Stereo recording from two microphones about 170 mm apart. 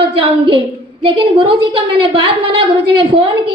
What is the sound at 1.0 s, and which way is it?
A woman's voice, 30° right (ahead or behind).